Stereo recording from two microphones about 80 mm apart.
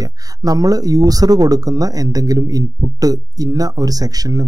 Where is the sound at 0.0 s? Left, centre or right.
Right.